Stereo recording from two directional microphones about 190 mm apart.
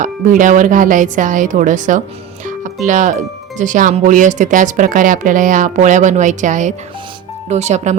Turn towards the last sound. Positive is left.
turn(degrees=-35)  # may be behind; listen again after turning